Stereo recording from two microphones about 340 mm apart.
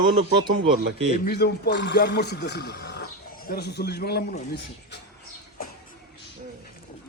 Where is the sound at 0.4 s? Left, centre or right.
Centre.